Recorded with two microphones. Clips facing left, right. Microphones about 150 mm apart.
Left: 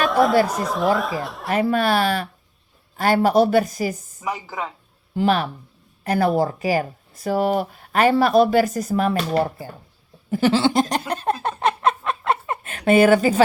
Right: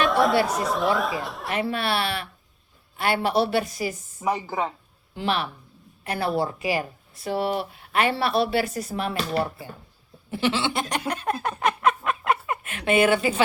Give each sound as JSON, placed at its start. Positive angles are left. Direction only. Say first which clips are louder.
{"t": 0.0, "sound": "chatter", "louder": "left 3 dB", "side_deg": 0}
{"t": 0.4, "sound": "speech", "louder": "left 3 dB", "side_deg": 0}
{"t": 1.5, "sound": "speech", "louder": "left 7 dB", "side_deg": 45}
{"t": 4.3, "sound": "a woman's voice", "louder": "right 2 dB", "side_deg": -30}
{"t": 5.1, "sound": "speech", "louder": "left 7 dB", "side_deg": 45}